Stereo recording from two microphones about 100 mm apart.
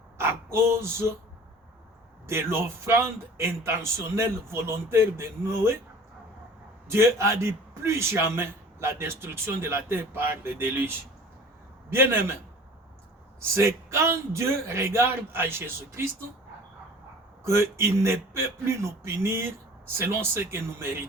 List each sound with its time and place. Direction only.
0.2 s speech: 25° right (ahead or behind)
2.2 s a man's voice: 25° right (ahead or behind)
6.8 s a man's voice: 25° right (ahead or behind)
13.4 s a man's voice: 25° right (ahead or behind)
17.4 s a man's voice: 25° right (ahead or behind)